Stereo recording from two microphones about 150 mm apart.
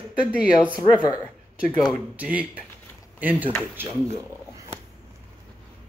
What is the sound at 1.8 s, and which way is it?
Speech, 5° right (ahead or behind).